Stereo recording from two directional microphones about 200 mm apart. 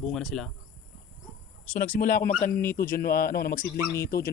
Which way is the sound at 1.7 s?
40° left (ahead or behind).